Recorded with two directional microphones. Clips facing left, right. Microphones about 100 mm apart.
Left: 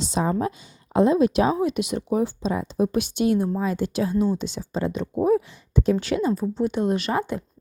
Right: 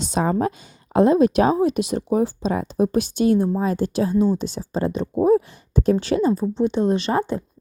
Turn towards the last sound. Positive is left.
turn(degrees=-30)  # may be behind; listen again after turning